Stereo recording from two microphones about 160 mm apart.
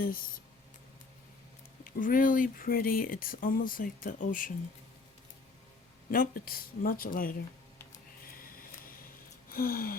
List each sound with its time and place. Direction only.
1.8 s speech: 60° left (ahead or behind)
6.1 s speech: 60° left (ahead or behind)
7.9 s music: 60° left (ahead or behind)